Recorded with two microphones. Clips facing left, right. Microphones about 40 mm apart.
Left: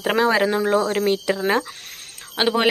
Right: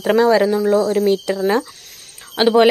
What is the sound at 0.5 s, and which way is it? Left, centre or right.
Speech, left.